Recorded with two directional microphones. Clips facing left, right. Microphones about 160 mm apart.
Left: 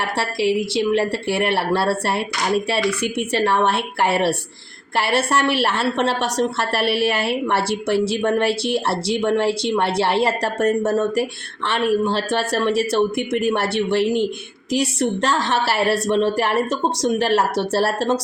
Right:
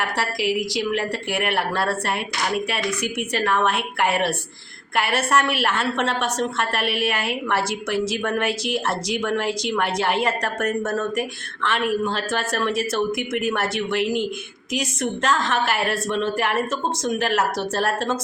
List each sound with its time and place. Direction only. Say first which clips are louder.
0.0 s a woman's voice: left 3 dB; 30° left (ahead or behind)